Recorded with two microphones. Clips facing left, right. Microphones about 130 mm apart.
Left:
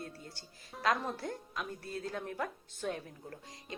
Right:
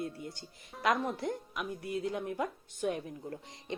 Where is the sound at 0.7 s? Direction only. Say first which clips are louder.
Right 2 dB; centre (ahead or behind).